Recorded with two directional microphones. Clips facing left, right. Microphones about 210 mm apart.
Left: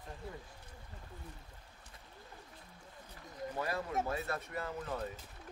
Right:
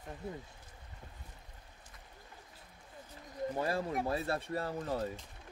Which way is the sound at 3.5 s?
30° right (ahead or behind).